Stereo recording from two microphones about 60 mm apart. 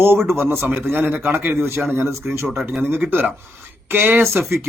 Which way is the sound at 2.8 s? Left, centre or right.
Right.